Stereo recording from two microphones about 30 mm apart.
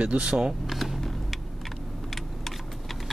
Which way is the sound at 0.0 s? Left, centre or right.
Right.